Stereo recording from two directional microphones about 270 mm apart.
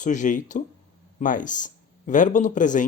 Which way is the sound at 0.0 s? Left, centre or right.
Left.